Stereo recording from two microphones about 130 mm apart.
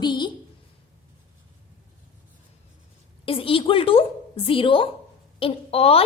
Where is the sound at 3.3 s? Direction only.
45° left (ahead or behind).